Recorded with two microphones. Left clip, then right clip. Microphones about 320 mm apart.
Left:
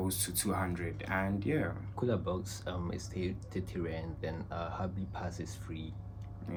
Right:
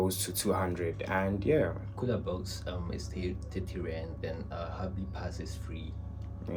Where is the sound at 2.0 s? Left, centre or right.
Centre.